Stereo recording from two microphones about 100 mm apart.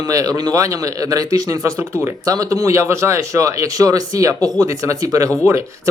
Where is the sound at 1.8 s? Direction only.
25° right (ahead or behind).